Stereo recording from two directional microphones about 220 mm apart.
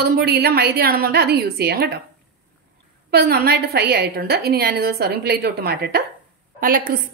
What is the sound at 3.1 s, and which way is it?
A woman's voice, 45° right (ahead or behind).